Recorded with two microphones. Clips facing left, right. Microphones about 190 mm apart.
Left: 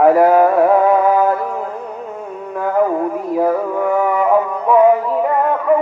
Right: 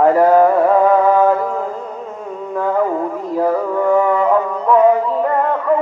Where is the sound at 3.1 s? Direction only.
10° left (ahead or behind).